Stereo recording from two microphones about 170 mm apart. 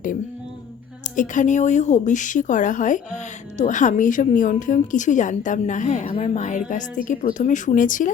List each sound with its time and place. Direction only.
1.1 s a woman's voice: 50° left (ahead or behind)